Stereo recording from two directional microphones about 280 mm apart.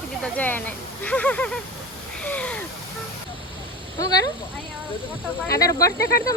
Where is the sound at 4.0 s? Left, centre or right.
Centre.